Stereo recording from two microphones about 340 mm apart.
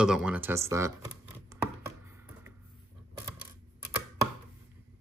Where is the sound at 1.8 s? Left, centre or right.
Centre.